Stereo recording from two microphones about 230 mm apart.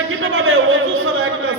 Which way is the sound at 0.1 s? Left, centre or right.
Right.